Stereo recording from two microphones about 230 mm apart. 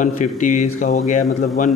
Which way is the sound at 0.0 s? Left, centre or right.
Left.